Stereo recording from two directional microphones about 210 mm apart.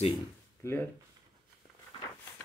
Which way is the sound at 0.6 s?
15° left (ahead or behind).